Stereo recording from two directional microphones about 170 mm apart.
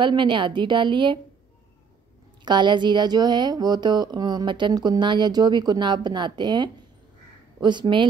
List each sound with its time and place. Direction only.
0.0 s speech: 30° right (ahead or behind)
2.4 s speech: 25° right (ahead or behind)